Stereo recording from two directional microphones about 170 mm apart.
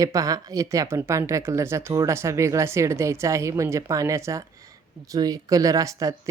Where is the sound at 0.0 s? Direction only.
20° right (ahead or behind).